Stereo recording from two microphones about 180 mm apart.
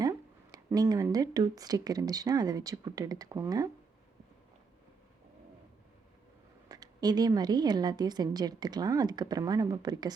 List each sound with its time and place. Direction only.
0.5 s a woman's voice: 20° right (ahead or behind)
6.7 s a woman's voice: 20° right (ahead or behind)